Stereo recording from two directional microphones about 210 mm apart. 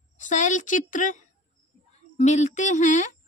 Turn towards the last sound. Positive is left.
turn(degrees=35)  # may be behind; listen again after turning